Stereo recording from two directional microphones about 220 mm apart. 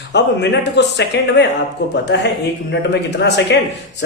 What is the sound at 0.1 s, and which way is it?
Speech, 50° left (ahead or behind).